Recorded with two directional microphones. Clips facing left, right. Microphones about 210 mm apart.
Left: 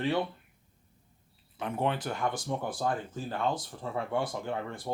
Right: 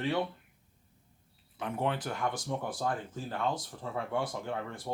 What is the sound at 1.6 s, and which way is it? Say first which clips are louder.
Speech: left 2 dB; 25° left (ahead or behind).